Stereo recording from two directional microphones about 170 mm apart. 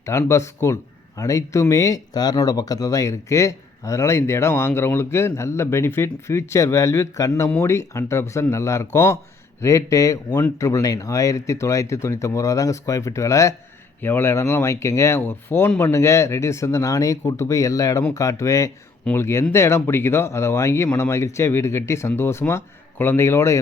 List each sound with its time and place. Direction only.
0.0 s speech: 15° left (ahead or behind)